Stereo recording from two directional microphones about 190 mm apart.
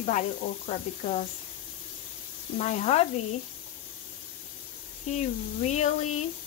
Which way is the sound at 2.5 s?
40° left (ahead or behind).